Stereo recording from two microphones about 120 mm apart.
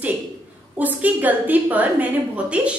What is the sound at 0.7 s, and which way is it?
A woman's voice, 15° right (ahead or behind).